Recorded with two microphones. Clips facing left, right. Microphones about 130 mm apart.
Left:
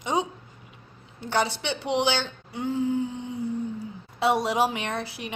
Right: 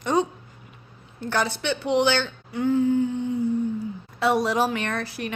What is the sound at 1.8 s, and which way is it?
A woman's voice, 20° left (ahead or behind).